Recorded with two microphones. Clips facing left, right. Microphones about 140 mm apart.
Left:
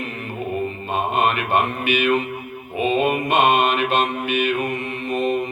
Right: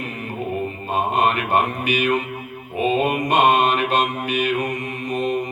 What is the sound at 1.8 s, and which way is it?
Mantra, 40° right (ahead or behind).